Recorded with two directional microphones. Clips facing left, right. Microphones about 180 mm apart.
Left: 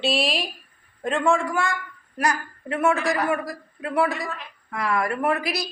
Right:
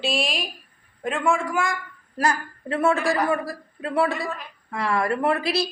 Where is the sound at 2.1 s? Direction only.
30° right (ahead or behind).